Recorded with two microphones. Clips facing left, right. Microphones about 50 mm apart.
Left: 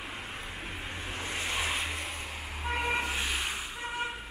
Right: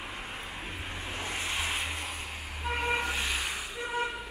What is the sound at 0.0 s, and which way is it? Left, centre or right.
Vehicle, centre.